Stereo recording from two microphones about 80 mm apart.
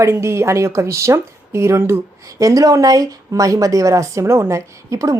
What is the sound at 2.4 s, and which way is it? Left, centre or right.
A woman's voice, right.